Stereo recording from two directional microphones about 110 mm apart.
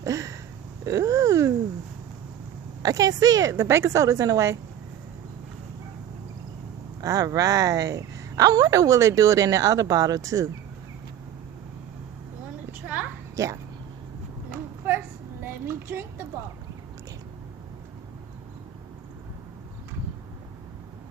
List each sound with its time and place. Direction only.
0.0 s a woman's voice: 30° right (ahead or behind)
2.8 s a woman's voice: 35° right (ahead or behind)
7.0 s a woman's voice: 30° right (ahead or behind)
13.3 s speech: 30° right (ahead or behind)
14.8 s a sound: 20° right (ahead or behind)
15.4 s speech: 20° right (ahead or behind)